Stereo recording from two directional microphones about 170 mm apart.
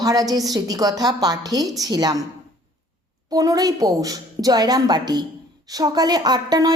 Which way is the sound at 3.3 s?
20° right (ahead or behind).